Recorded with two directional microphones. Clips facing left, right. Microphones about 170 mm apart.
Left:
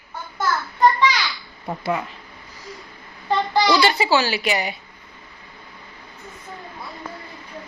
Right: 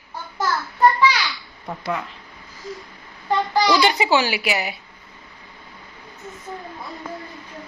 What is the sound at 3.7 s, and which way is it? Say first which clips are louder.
A woman's voice: right 1 dB; 15° right (ahead or behind).